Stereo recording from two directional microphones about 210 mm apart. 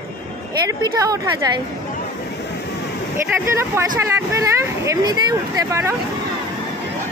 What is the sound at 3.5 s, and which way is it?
Speech, 10° right (ahead or behind).